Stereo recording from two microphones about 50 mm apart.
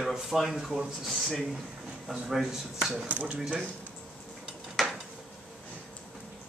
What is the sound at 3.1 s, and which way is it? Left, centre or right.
Speech, right.